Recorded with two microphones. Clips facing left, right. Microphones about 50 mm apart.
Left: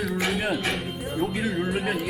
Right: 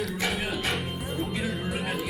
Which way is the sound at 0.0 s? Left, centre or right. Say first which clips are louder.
Left 3 dB; centre.